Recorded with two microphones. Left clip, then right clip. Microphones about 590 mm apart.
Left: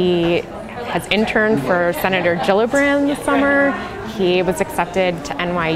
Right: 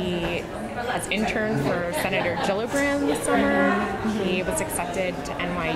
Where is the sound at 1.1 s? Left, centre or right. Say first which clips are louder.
Left 11 dB; left.